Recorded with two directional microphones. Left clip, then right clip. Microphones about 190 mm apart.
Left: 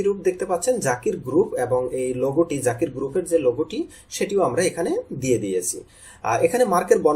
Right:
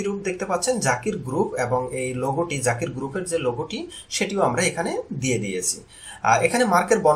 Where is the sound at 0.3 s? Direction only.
40° left (ahead or behind).